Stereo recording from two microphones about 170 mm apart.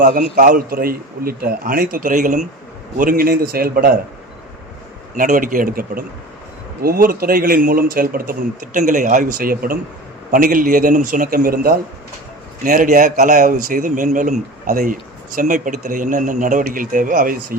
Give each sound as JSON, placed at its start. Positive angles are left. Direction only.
{"t": 0.0, "sound": "a man's voice", "side_deg": -55}
{"t": 5.1, "sound": "a man's voice", "side_deg": -50}